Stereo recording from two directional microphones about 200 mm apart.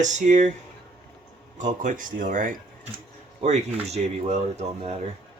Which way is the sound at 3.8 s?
35° right (ahead or behind).